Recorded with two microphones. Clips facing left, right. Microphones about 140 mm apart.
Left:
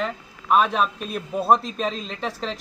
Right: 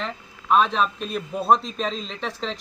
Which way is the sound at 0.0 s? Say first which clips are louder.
Left 4 dB; 5° left (ahead or behind).